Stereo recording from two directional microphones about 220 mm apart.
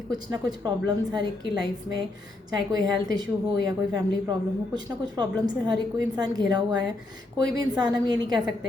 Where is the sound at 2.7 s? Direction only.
15° right (ahead or behind).